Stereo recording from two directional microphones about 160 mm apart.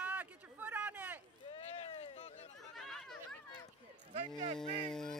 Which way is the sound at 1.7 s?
40° left (ahead or behind).